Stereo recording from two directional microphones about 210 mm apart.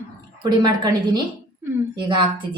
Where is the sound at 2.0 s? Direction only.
20° right (ahead or behind).